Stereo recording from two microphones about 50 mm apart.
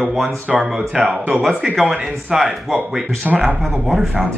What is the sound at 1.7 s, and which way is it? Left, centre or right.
Speech, centre.